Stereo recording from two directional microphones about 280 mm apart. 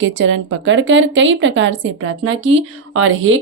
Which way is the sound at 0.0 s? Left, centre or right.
Right.